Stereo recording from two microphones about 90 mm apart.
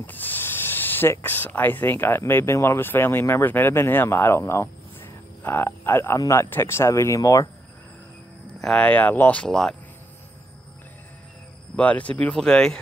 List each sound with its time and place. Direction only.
0.0 s speech: 20° left (ahead or behind); by 7.4 s 35° left (ahead or behind)
8.5 s speech: 10° left (ahead or behind)
9.4 s speech: 5° left (ahead or behind)
11.7 s speech: 15° left (ahead or behind)